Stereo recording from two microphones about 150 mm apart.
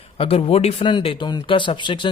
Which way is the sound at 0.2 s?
40° left (ahead or behind).